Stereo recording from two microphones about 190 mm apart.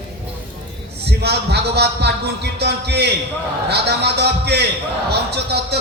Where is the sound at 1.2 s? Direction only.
60° right (ahead or behind).